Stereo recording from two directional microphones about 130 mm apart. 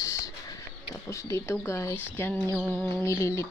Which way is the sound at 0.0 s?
25° left (ahead or behind).